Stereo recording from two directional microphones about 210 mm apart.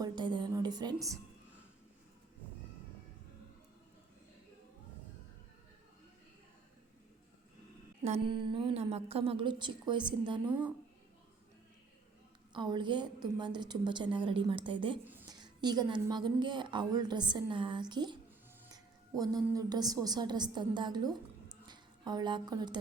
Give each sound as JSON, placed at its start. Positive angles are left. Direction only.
{"t": 0.0, "sound": "music", "side_deg": -20}
{"t": 8.0, "sound": "a woman's voice", "side_deg": -25}
{"t": 12.5, "sound": "a woman's voice", "side_deg": -20}
{"t": 15.0, "sound": "music", "side_deg": -10}
{"t": 15.4, "sound": "a woman's voice", "side_deg": -20}